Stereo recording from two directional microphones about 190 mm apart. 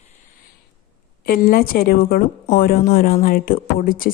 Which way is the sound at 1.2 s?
50° left (ahead or behind).